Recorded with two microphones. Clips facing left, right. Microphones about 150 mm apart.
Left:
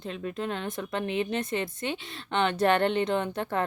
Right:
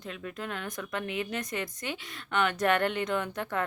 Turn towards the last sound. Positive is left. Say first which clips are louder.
# left 3 dB
turn(degrees=30)  # may be behind; listen again after turning